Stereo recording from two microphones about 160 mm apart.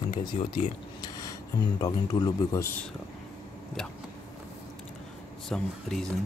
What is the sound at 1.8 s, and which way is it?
Speech, 25° left (ahead or behind).